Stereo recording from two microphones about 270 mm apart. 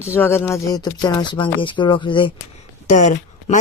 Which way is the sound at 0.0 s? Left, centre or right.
Centre.